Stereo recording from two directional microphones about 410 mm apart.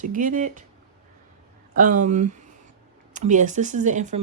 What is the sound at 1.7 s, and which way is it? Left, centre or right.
Speech, centre.